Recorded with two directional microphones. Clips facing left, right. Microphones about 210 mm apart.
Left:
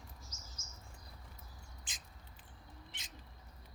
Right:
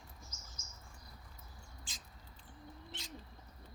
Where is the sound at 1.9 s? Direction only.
20° left (ahead or behind).